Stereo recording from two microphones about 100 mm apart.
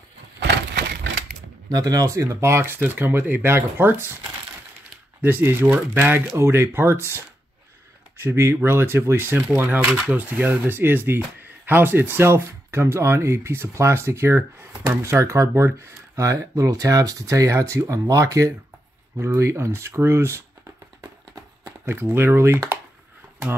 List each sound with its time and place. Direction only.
1.7 s speech: 40° right (ahead or behind); by 4.1 s 20° right (ahead or behind)
5.2 s speech: 20° right (ahead or behind)
21.8 s speech: 25° right (ahead or behind)